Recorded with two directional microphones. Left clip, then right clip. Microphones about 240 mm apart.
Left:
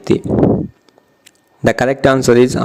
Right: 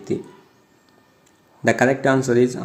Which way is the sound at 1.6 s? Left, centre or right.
Left.